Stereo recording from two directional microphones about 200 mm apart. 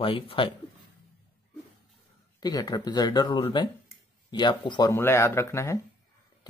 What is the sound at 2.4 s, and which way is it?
Speech, 20° left (ahead or behind).